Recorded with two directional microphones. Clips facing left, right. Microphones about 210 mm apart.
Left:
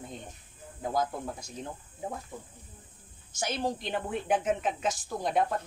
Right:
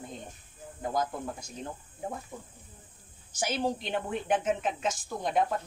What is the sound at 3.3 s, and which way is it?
A woman's voice, 5° right (ahead or behind).